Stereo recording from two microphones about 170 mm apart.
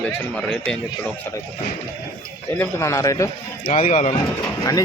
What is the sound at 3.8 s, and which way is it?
Speech, 40° left (ahead or behind).